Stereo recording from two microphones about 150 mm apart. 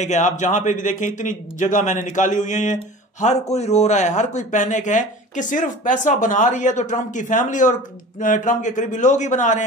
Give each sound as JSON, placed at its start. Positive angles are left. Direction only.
{"t": 0.0, "sound": "a man's voice", "side_deg": 50}